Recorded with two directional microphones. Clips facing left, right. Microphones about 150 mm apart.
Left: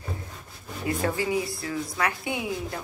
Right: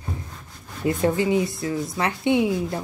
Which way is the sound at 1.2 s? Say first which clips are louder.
Right 6 dB; 25° right (ahead or behind).